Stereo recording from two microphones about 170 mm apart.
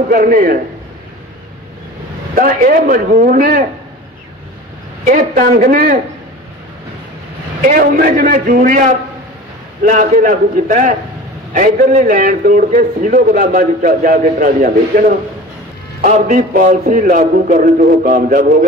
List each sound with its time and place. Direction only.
0.1 s a man's voice: 55° right (ahead or behind)
2.3 s a man's voice: 50° right (ahead or behind)
5.0 s a man's voice: 50° right (ahead or behind)
7.6 s a man's voice: 55° right (ahead or behind)